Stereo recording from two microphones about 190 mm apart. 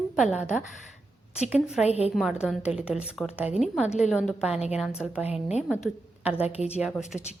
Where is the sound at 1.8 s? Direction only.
35° left (ahead or behind).